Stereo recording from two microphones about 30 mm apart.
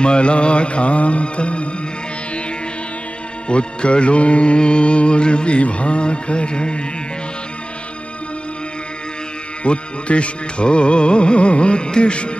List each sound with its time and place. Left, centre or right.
0.0 s music: left
3.4 s music: left
9.6 s music: left